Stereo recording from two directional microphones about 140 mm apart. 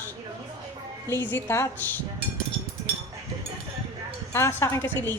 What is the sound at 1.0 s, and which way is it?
Speech, 15° left (ahead or behind).